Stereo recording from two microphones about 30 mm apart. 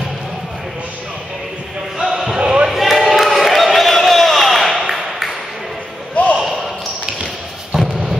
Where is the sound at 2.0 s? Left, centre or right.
Centre.